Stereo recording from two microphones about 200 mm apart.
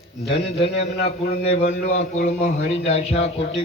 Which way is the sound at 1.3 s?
40° left (ahead or behind).